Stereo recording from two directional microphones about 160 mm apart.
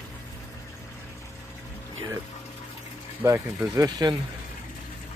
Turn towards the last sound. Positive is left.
turn(degrees=-25)  # may be behind; listen again after turning